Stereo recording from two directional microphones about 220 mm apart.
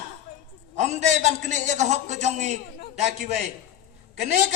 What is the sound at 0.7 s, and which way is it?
A man's voice, 30° right (ahead or behind).